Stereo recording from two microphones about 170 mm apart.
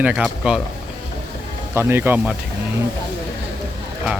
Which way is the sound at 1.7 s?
15° right (ahead or behind).